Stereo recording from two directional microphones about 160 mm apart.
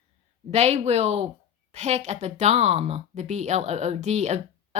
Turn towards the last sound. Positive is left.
turn(degrees=-45)  # may be behind; listen again after turning